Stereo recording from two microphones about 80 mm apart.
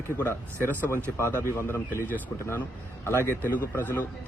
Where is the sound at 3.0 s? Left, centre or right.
Left.